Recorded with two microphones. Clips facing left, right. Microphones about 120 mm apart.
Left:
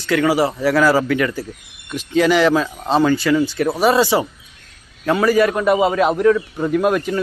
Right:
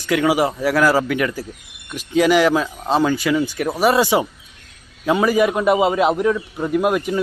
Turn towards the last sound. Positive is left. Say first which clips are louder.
# left 1 dB
turn(degrees=-10)  # may be behind; listen again after turning